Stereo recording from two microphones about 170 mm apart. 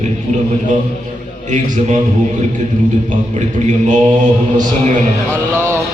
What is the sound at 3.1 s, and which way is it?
A man's voice, 45° right (ahead or behind).